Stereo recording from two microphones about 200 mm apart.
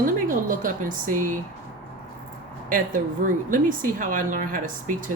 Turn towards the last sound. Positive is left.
turn(degrees=-40)  # may be behind; listen again after turning